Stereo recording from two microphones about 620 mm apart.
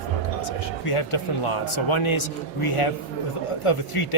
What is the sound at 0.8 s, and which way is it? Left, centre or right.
A man's voice, left.